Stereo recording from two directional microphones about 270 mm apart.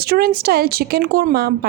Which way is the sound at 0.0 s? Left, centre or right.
Right.